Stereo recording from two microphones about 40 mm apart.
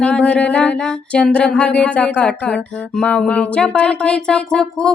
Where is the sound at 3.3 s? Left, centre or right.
Left.